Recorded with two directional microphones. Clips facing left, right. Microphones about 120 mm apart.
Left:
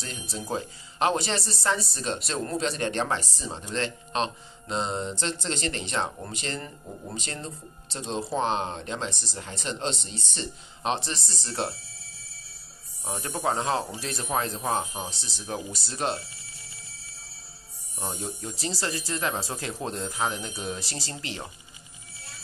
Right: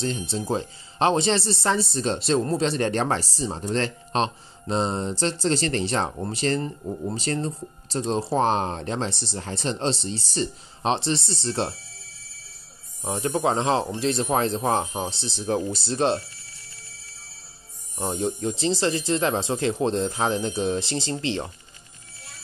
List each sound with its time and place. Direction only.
0.0 s speech: 25° right (ahead or behind)
13.0 s speech: 20° right (ahead or behind)
18.2 s speech: 25° right (ahead or behind)